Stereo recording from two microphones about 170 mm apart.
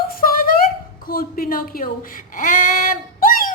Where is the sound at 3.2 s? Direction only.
55° left (ahead or behind).